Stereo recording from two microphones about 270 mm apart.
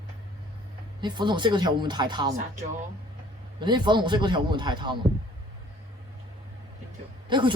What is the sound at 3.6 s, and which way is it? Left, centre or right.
A man's voice, centre.